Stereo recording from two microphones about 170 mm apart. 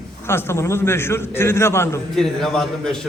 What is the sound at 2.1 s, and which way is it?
Speech, centre (ahead or behind).